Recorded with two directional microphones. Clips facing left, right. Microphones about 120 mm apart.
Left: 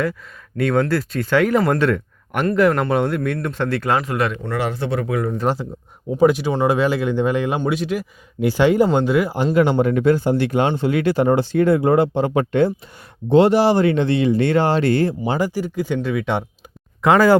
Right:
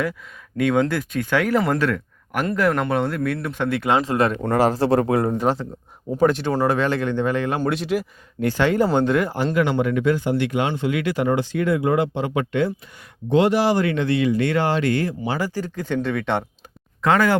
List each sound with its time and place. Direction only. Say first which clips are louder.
0.5 s speech: left 1 dB; 10° right (ahead or behind); by 5.4 s 35° right (ahead or behind)
6.1 s speech: left 3 dB; 10° left (ahead or behind)
7.6 s speech: left 1 dB; centre (ahead or behind)
8.4 s speech: left 4 dB; 15° left (ahead or behind)
9.6 s speech: left 4 dB; 35° left (ahead or behind)
15.4 s speech: left 4 dB; 15° left (ahead or behind)